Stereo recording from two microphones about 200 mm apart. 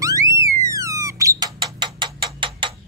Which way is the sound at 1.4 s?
20° right (ahead or behind).